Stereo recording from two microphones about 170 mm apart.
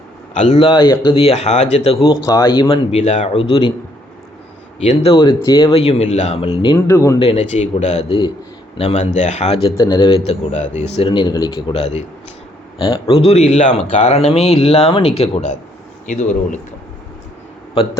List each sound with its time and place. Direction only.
0.3 s a man's voice: 40° left (ahead or behind)
0.7 s a man's voice: 25° left (ahead or behind)
2.2 s a man's voice: 20° left (ahead or behind)
4.8 s a man's voice: 35° left (ahead or behind)
6.8 s speech: 15° left (ahead or behind)
7.2 s a man's voice: 35° left (ahead or behind)